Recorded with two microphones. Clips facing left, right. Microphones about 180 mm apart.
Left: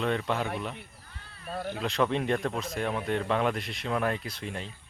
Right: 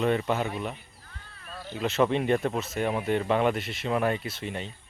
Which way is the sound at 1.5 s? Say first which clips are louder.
Left 5 dB; 55° left (ahead or behind).